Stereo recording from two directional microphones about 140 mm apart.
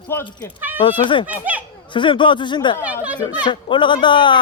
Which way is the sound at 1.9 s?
35° left (ahead or behind).